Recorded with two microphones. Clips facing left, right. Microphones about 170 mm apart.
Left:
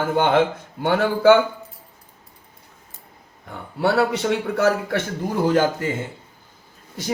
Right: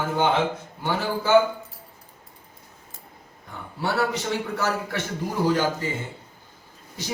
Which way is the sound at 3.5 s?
60° left (ahead or behind).